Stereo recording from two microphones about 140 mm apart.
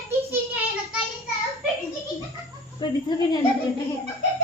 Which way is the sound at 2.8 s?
35° left (ahead or behind).